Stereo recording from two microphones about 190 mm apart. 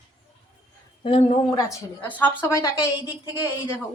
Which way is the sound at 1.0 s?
30° left (ahead or behind).